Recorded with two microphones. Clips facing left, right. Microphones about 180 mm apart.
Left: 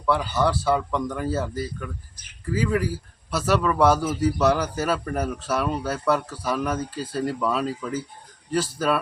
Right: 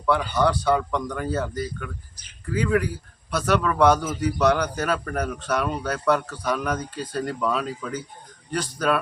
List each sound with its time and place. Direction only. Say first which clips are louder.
0.0 s speech: right 1 dB; centre (ahead or behind)